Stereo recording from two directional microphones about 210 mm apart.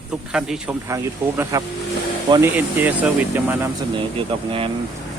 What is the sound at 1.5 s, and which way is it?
Speech, 15° right (ahead or behind).